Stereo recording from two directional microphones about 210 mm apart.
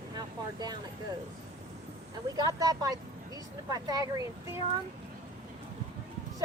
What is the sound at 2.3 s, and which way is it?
Speech, 20° right (ahead or behind).